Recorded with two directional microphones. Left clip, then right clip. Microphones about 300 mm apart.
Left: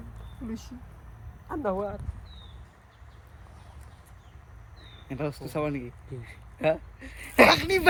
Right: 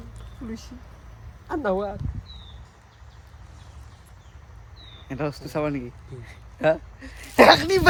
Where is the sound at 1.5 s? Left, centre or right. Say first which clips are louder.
Right 5 dB; right.